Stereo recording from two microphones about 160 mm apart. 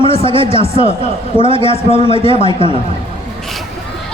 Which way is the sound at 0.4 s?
40° left (ahead or behind).